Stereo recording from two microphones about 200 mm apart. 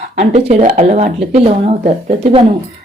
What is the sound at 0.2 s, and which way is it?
Speech, 30° right (ahead or behind).